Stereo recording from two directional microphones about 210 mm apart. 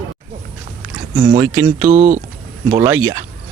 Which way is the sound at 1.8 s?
30° right (ahead or behind).